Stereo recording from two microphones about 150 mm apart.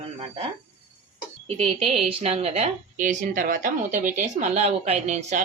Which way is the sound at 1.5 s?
40° right (ahead or behind).